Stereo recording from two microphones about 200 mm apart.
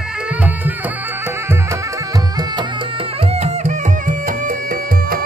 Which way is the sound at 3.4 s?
35° right (ahead or behind).